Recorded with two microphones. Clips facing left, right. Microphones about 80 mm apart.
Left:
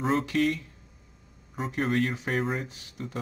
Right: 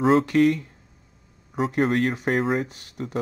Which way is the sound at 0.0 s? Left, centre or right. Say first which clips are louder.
Right 8 dB; right.